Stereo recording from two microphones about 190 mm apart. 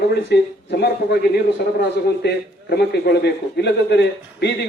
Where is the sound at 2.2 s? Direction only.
60° left (ahead or behind).